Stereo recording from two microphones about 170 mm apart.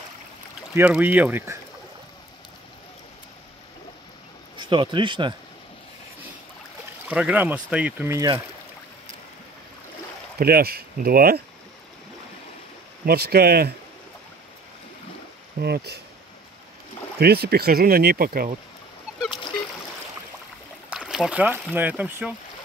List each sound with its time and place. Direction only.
0.7 s speech: 10° right (ahead or behind)
4.6 s speech: 30° right (ahead or behind)
7.1 s speech: 10° right (ahead or behind)
10.4 s speech: 65° right (ahead or behind)
13.0 s speech: 65° right (ahead or behind)
15.6 s speech: 70° right (ahead or behind)
17.2 s speech: 70° right (ahead or behind)
20.9 s speech: 5° right (ahead or behind)